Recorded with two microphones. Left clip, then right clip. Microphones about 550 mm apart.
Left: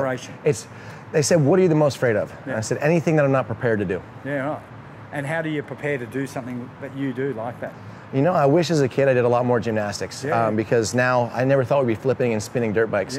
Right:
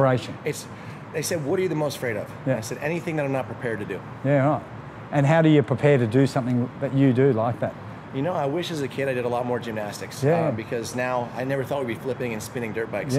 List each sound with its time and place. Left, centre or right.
0.5 s speech: left
4.3 s speech: right
8.1 s speech: left